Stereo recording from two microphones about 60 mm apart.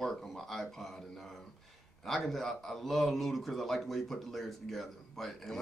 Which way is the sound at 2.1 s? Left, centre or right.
Centre.